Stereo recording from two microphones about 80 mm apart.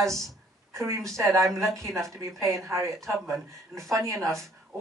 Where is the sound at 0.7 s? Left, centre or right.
Right.